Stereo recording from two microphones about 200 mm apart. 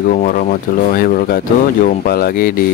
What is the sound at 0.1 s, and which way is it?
Speech, 45° left (ahead or behind).